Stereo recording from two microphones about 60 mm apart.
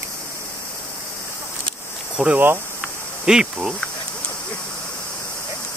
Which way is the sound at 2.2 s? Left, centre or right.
Centre.